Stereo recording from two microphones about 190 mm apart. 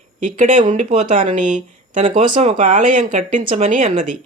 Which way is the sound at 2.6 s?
45° right (ahead or behind).